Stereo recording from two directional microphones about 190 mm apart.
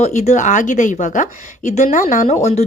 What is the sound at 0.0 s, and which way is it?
A woman's voice, 40° left (ahead or behind).